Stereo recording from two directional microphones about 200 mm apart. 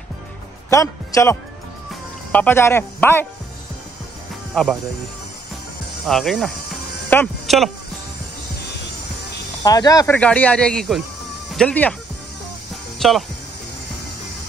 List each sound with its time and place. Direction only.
0.7 s a man's voice: 15° left (ahead or behind)
6.0 s speech: centre (ahead or behind)
9.6 s speech: 20° left (ahead or behind)
10.1 s speech: 5° left (ahead or behind)
13.0 s speech: centre (ahead or behind)